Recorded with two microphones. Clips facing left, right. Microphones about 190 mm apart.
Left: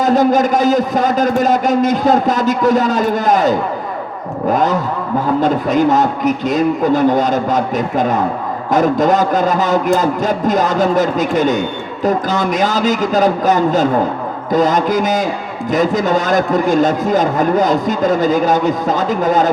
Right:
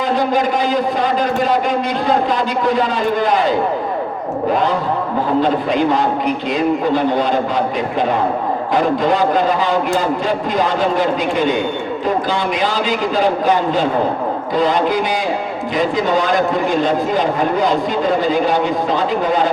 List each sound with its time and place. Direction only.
0.0 s a man's voice: 45° left (ahead or behind)